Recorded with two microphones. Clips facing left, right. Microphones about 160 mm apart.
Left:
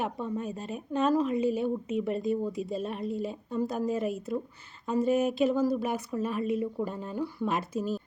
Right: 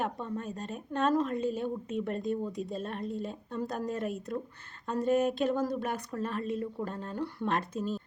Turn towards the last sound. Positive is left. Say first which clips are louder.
# left 2 dB
turn(degrees=5)  # may be behind; listen again after turning